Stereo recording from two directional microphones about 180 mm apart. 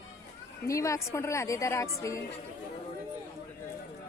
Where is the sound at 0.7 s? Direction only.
15° left (ahead or behind).